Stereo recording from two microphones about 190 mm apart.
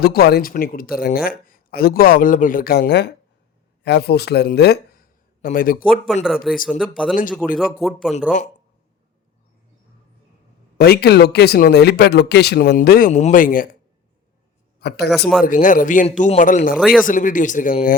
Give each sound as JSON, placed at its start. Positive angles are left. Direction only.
{"t": 0.0, "sound": "speech", "side_deg": 55}
{"t": 5.4, "sound": "speech", "side_deg": 50}
{"t": 6.2, "sound": "speech", "side_deg": 0}
{"t": 10.8, "sound": "speech", "side_deg": 55}
{"t": 14.8, "sound": "a man's voice", "side_deg": 60}
{"t": 15.4, "sound": "speech", "side_deg": 45}
{"t": 16.7, "sound": "speech", "side_deg": 0}
{"t": 17.1, "sound": "speech", "side_deg": 45}